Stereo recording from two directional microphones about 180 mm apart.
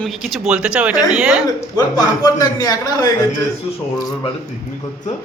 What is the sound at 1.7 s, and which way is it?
A man's voice, 20° left (ahead or behind).